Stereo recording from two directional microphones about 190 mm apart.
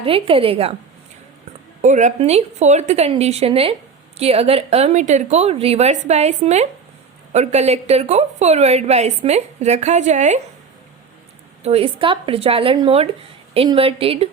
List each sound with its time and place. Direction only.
0.0 s speech: 30° right (ahead or behind)
1.8 s a woman's voice: 40° right (ahead or behind)
11.6 s a woman's voice: 30° right (ahead or behind)